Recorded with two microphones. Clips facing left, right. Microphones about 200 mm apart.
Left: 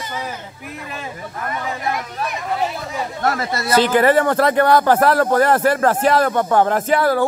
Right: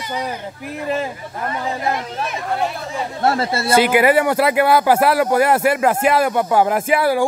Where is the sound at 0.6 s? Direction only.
35° right (ahead or behind).